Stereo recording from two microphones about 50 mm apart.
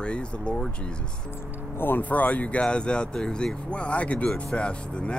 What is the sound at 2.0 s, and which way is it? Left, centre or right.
Speech, left.